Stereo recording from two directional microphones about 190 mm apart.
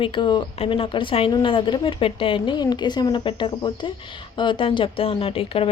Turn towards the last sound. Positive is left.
turn(degrees=30)  # may be behind; listen again after turning